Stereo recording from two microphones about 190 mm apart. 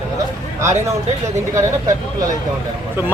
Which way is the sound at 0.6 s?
15° right (ahead or behind).